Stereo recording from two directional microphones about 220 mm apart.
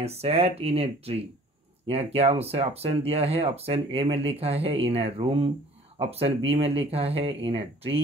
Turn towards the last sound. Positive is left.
turn(degrees=-25)  # may be behind; listen again after turning